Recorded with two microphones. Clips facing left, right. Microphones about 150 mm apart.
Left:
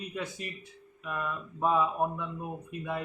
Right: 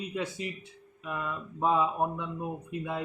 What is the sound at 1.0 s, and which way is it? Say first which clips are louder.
Speech: even; 20° right (ahead or behind).